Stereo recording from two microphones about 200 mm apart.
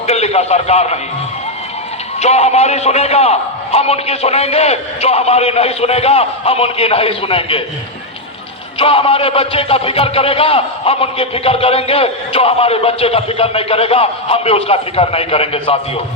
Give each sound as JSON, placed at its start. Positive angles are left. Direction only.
{"t": 0.1, "sound": "a man's voice", "side_deg": 30}
{"t": 2.2, "sound": "a man's voice", "side_deg": 30}
{"t": 8.8, "sound": "a man's voice", "side_deg": 30}